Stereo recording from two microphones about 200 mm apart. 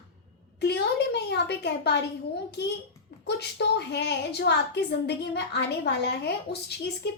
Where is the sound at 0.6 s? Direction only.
55° left (ahead or behind).